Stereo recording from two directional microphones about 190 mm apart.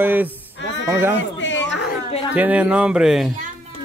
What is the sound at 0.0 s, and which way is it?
Speech, 10° right (ahead or behind).